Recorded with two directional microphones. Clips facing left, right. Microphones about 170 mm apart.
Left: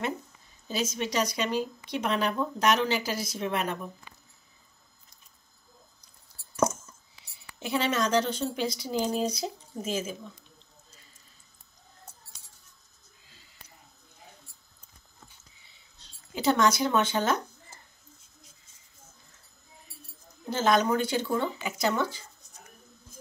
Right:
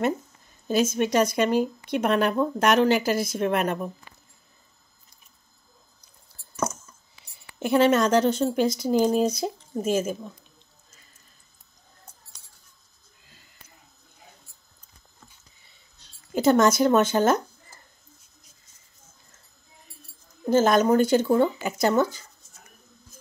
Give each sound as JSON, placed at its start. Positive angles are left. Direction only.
{"t": 0.7, "sound": "a woman's voice", "side_deg": -50}
{"t": 7.5, "sound": "a woman's voice", "side_deg": -55}
{"t": 16.3, "sound": "a woman's voice", "side_deg": -50}
{"t": 20.4, "sound": "a woman's voice", "side_deg": -50}